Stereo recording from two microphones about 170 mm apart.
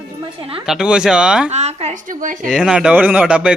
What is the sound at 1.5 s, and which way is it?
Speech, 40° right (ahead or behind).